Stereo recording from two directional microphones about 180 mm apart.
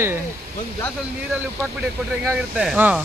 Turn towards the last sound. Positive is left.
turn(degrees=-5)  # may be behind; listen again after turning